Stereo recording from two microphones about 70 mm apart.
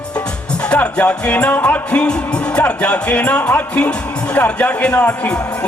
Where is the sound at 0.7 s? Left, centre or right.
Centre.